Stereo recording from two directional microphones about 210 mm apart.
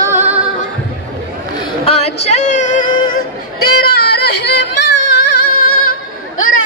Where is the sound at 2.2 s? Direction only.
35° left (ahead or behind).